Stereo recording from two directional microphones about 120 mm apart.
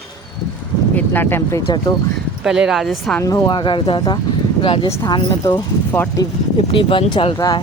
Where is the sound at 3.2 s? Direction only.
25° left (ahead or behind).